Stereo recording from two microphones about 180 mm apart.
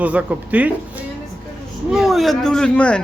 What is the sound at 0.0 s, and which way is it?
A man's voice, 10° right (ahead or behind).